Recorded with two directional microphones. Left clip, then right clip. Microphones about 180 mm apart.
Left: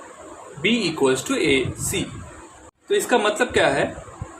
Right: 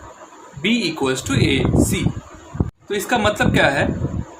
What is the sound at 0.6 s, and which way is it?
Speech, 25° right (ahead or behind).